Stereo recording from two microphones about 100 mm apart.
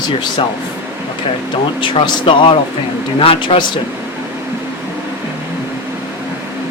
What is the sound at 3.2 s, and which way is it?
Speech, 70° left (ahead or behind).